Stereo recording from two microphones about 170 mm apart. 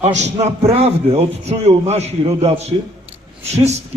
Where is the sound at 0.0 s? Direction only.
40° right (ahead or behind).